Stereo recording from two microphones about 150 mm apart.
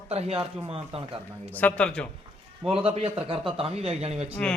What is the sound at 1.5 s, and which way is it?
Speech, 10° left (ahead or behind).